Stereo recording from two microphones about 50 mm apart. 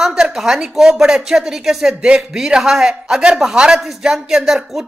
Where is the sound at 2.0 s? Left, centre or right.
Right.